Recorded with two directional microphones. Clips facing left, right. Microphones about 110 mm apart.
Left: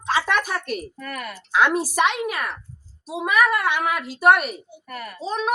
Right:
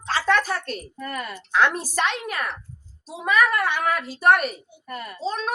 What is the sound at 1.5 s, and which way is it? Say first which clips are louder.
A woman's voice: left 2 dB; 10° left (ahead or behind).